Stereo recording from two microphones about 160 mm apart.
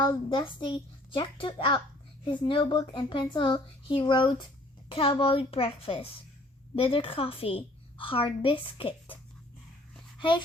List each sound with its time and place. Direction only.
0.0 s a woman's voice: 30° left (ahead or behind)
10.2 s speech: 30° left (ahead or behind)